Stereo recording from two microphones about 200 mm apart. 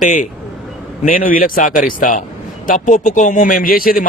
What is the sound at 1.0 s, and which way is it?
A man's voice, 40° left (ahead or behind).